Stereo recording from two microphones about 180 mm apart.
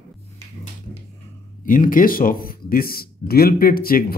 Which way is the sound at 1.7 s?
50° left (ahead or behind).